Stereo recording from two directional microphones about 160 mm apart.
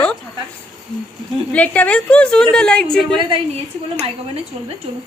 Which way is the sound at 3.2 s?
30° right (ahead or behind).